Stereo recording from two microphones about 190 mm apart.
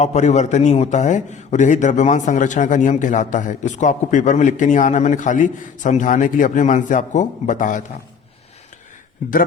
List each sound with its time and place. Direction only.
0.0 s a man's voice: 35° left (ahead or behind)